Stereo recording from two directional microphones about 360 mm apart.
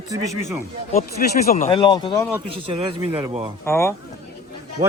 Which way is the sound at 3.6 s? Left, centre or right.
Centre.